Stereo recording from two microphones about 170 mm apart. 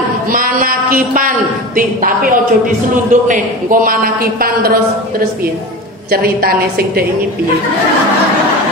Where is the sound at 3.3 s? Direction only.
55° right (ahead or behind).